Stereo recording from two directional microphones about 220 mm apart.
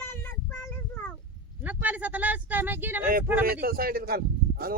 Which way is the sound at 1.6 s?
5° right (ahead or behind).